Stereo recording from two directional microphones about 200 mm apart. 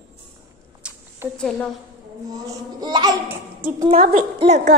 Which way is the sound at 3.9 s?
30° right (ahead or behind).